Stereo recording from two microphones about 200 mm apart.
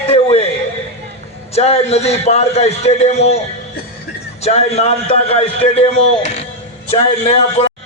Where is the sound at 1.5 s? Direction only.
30° left (ahead or behind).